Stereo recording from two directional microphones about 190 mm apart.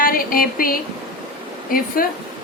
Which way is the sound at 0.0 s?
50° left (ahead or behind).